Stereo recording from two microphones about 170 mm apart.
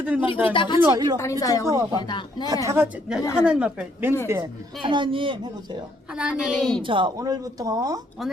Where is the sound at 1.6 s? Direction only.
20° right (ahead or behind).